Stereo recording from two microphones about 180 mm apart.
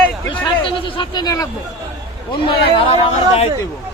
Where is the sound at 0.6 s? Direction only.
30° left (ahead or behind).